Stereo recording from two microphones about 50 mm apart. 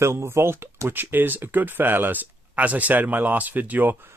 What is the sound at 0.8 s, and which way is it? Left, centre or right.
Speech, right.